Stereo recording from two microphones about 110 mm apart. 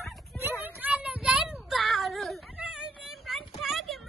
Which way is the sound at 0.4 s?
20° right (ahead or behind).